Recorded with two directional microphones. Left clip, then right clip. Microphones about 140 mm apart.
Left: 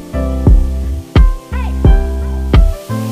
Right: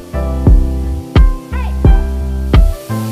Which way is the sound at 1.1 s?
Centre (ahead or behind).